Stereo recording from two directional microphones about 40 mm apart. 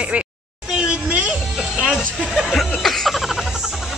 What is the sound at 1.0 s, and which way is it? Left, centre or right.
Music, right.